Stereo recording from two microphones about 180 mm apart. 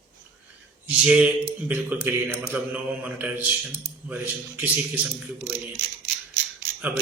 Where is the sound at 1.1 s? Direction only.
5° right (ahead or behind).